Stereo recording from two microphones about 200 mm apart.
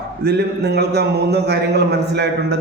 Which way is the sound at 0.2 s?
55° right (ahead or behind).